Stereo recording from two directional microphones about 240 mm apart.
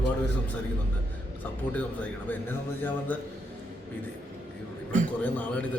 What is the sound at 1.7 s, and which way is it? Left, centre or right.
Speech, centre.